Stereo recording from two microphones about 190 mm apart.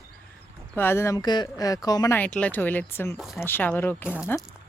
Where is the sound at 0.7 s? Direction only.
10° left (ahead or behind).